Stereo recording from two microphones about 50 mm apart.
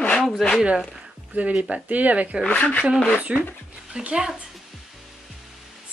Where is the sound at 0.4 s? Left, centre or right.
Centre.